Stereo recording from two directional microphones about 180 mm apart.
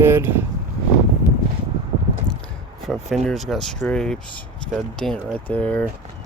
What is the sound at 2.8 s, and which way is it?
Speech, centre (ahead or behind).